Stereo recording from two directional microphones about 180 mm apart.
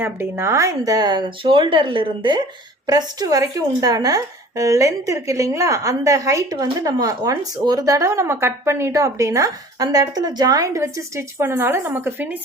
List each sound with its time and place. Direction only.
0.0 s a woman's voice: 15° right (ahead or behind)